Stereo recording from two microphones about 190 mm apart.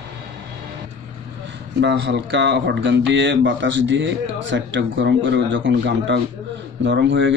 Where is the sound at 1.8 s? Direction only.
65° right (ahead or behind).